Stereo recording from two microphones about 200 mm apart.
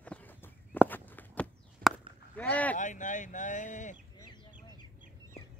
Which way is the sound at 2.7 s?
40° left (ahead or behind).